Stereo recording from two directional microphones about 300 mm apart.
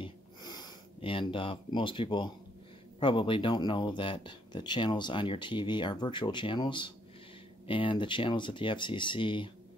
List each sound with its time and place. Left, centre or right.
0.0 s sniff: centre
3.0 s speech: centre